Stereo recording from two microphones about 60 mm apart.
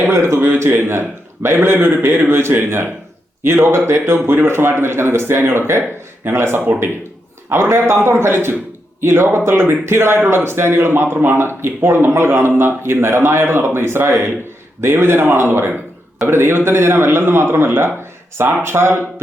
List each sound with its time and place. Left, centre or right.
0.1 s a man's voice: right